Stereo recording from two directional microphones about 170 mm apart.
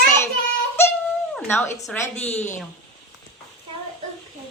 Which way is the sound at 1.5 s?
15° left (ahead or behind).